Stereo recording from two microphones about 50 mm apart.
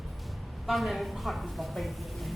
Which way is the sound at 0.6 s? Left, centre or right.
Centre.